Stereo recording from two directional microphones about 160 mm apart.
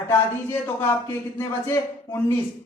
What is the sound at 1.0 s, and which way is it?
A man's voice, 15° left (ahead or behind).